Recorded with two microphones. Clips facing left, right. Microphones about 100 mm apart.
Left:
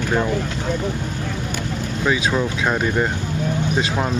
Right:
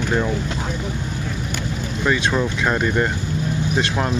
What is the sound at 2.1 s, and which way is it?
Speech, 5° left (ahead or behind).